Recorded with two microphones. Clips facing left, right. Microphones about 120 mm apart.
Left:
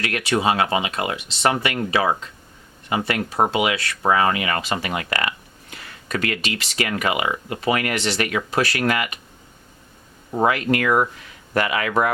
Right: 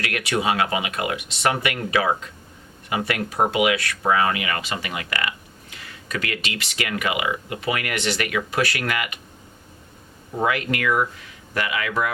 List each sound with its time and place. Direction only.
0.0 s speech: 30° left (ahead or behind)
10.3 s speech: 35° left (ahead or behind)